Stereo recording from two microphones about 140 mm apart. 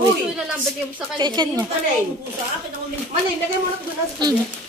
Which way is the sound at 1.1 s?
30° right (ahead or behind).